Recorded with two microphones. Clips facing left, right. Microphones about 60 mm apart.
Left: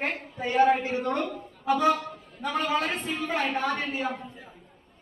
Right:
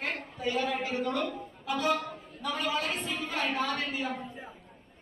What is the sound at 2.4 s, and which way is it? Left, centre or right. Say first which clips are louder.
Speech: left 5 dB; left.